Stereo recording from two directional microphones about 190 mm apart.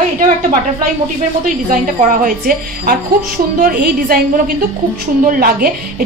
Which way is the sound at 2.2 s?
50° right (ahead or behind).